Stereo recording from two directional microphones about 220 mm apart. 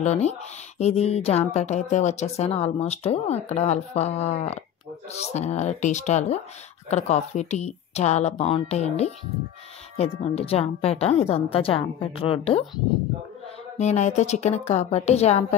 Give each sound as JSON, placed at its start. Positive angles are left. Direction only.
{"t": 0.0, "sound": "a woman's voice", "side_deg": 30}
{"t": 10.2, "sound": "speech", "side_deg": 25}
{"t": 13.7, "sound": "a woman's voice", "side_deg": 30}